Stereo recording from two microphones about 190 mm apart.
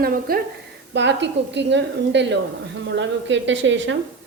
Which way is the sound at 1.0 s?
65° right (ahead or behind).